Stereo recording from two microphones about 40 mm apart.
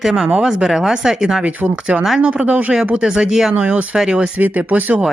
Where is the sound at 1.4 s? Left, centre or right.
Right.